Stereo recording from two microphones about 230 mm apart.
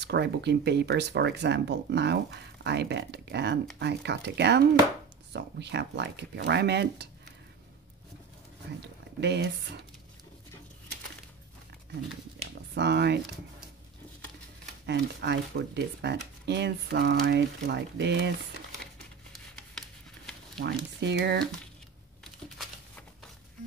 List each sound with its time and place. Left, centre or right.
0.0 s speech: right
8.8 s speech: right
12.7 s speech: right
14.9 s speech: right
20.6 s speech: right